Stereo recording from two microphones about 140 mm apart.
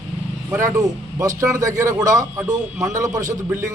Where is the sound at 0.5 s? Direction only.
20° right (ahead or behind).